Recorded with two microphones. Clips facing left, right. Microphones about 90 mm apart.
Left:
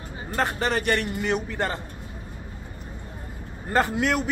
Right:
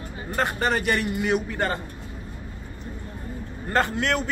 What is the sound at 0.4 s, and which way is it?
A man's voice, centre (ahead or behind).